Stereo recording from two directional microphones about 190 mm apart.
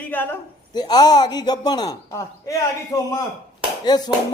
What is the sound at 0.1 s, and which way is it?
Speech, 10° left (ahead or behind).